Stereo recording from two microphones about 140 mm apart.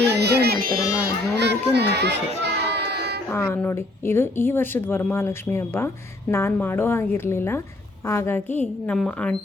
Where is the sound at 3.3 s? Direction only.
15° left (ahead or behind).